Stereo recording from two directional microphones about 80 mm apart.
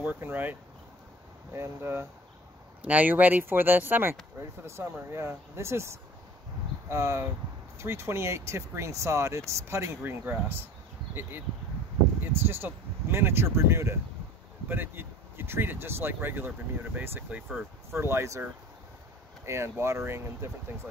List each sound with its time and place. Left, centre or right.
0.0 s speech: right
2.8 s speech: centre; by 18.4 s right
19.4 s speech: right